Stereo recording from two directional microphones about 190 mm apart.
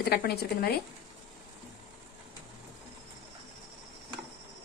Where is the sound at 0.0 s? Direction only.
55° left (ahead or behind).